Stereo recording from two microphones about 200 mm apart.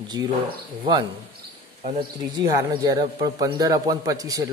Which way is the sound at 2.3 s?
20° right (ahead or behind).